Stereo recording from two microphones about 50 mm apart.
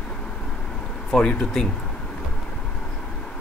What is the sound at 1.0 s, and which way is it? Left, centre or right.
Speech, centre.